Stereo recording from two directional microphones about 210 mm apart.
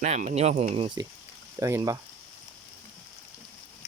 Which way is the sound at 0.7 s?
25° right (ahead or behind).